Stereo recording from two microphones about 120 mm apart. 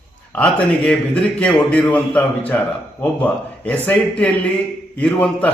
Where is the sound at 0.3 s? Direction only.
10° left (ahead or behind).